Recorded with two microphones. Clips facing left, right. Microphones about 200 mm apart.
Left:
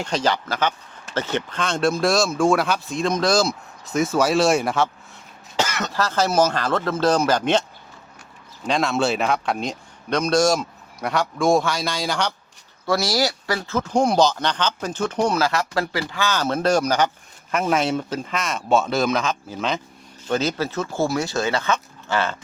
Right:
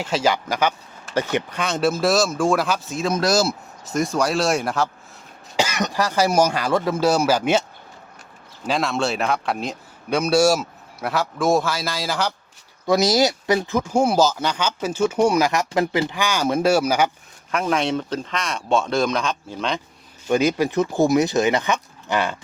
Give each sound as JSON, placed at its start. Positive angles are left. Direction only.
{"t": 0.0, "sound": "speech", "side_deg": -5}
{"t": 5.5, "sound": "speech", "side_deg": -15}
{"t": 8.6, "sound": "speech", "side_deg": 0}
{"t": 12.8, "sound": "speech", "side_deg": -20}
{"t": 17.5, "sound": "speech", "side_deg": 5}
{"t": 20.2, "sound": "speech", "side_deg": -10}